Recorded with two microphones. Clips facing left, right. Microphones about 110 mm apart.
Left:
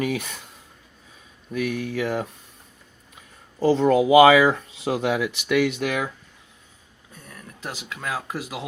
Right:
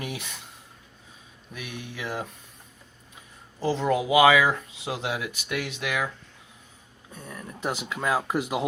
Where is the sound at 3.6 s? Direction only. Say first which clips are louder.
Left 7 dB; 45° left (ahead or behind).